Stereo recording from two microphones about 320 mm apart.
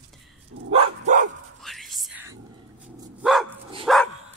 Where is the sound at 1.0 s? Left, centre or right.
Right.